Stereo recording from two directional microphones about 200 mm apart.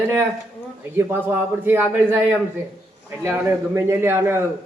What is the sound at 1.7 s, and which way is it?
A man's voice, 10° right (ahead or behind).